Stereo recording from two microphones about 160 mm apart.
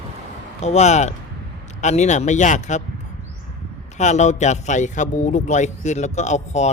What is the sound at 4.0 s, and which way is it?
A man's voice, 45° left (ahead or behind).